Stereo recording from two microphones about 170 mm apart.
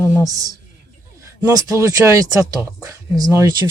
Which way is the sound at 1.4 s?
20° right (ahead or behind).